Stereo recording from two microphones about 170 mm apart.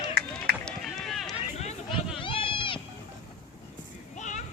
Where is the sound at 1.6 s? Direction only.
40° left (ahead or behind).